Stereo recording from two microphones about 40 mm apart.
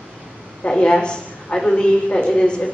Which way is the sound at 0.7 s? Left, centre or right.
Centre.